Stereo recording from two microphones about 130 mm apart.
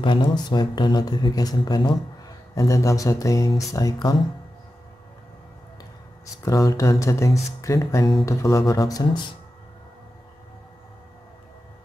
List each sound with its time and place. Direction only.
0.0 s speech: 40° left (ahead or behind)
6.4 s speech: 25° left (ahead or behind)